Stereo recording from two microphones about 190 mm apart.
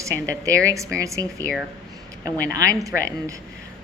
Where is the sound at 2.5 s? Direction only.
20° right (ahead or behind).